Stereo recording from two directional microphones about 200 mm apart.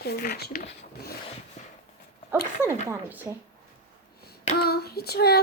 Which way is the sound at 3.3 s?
10° right (ahead or behind).